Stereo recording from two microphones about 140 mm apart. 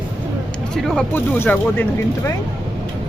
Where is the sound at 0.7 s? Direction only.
5° left (ahead or behind).